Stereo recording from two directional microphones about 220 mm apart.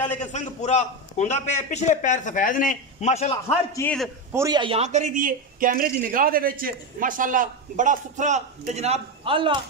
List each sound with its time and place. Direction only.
0.2 s a man's voice: 30° left (ahead or behind)
3.7 s a man's voice: 5° left (ahead or behind)
4.3 s a man's voice: 15° right (ahead or behind)